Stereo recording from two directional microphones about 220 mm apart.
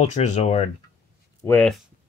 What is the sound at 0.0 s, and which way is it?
Speech, 30° left (ahead or behind).